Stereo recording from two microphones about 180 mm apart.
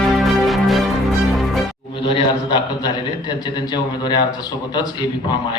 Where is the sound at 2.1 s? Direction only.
25° left (ahead or behind).